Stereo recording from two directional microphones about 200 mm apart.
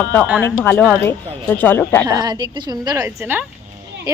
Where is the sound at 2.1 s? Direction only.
20° right (ahead or behind).